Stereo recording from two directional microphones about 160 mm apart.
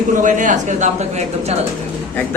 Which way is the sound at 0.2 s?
55° right (ahead or behind).